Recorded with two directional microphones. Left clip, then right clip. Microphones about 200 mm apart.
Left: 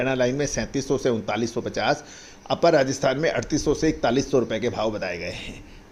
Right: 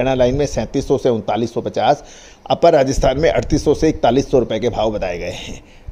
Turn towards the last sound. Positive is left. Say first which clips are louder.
# right 6 dB
turn(degrees=-35)  # may be behind; listen again after turning